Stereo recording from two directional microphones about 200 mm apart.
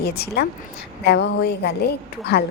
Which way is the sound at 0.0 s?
55° left (ahead or behind).